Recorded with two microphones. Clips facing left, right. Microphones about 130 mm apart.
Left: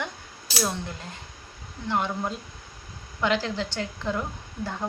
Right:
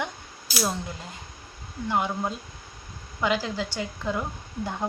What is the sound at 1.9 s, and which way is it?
A woman's voice, 10° right (ahead or behind).